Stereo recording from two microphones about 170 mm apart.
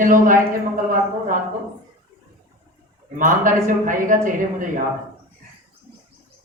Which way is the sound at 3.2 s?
50° right (ahead or behind).